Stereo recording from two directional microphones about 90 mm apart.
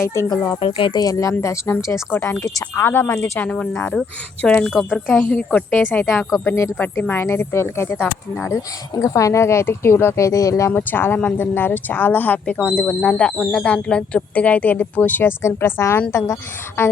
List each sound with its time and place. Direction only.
0.0 s speech: 35° left (ahead or behind)
0.6 s speech: 70° left (ahead or behind)
0.9 s speech: 40° left (ahead or behind)
2.1 s speech: 20° left (ahead or behind)
4.8 s speech: centre (ahead or behind)
5.2 s speech: 15° left (ahead or behind); by 10.7 s 35° left (ahead or behind)
10.7 s speech: 20° left (ahead or behind)
15.4 s speech: 30° left (ahead or behind)